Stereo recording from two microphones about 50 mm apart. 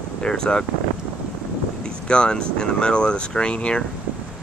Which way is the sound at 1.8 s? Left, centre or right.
Centre.